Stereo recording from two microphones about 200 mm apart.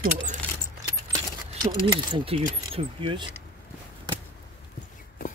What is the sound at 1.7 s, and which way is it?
Speech, 25° right (ahead or behind).